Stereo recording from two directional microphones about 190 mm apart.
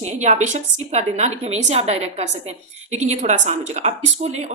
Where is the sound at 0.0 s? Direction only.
40° right (ahead or behind).